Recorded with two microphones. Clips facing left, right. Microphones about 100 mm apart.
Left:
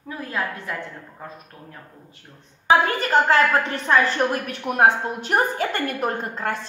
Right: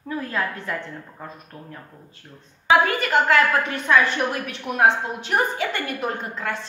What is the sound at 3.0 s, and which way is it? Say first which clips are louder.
A woman's voice: left 1 dB; 30° left (ahead or behind).